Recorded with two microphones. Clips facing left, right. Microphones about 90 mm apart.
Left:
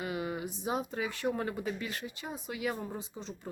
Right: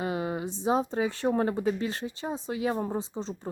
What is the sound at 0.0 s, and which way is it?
Speech, 30° right (ahead or behind).